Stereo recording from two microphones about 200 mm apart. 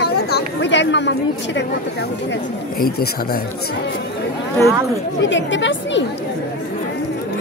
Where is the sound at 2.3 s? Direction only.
50° left (ahead or behind).